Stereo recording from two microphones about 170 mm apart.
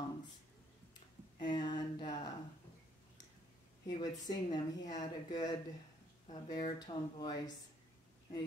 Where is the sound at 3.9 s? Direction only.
25° left (ahead or behind).